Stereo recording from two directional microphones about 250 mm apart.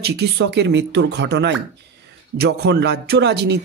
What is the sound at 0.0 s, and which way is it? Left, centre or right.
A man's voice, right.